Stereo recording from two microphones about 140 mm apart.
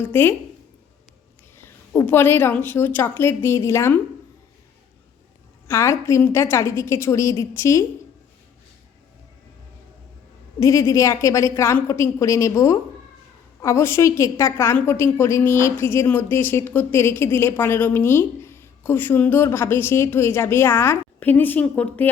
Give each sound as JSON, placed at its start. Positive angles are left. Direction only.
{"t": 0.0, "sound": "speech", "side_deg": 15}
{"t": 1.5, "sound": "speech", "side_deg": 20}
{"t": 5.6, "sound": "a woman's voice", "side_deg": 20}
{"t": 10.6, "sound": "a woman's voice", "side_deg": 20}